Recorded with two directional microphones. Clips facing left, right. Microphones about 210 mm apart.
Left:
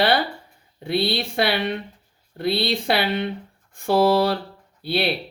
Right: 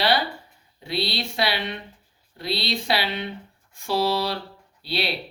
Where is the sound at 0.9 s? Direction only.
55° left (ahead or behind).